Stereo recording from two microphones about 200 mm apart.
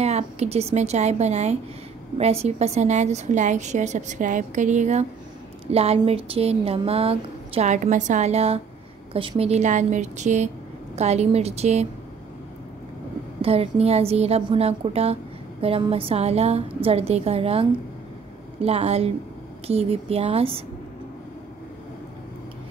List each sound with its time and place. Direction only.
0.0 s speech: 30° right (ahead or behind)
13.4 s a woman's voice: 30° right (ahead or behind)